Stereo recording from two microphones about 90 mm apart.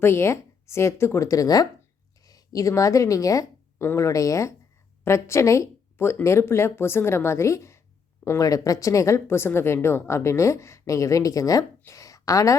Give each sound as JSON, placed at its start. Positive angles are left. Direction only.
{"t": 0.0, "sound": "a woman's voice", "side_deg": 30}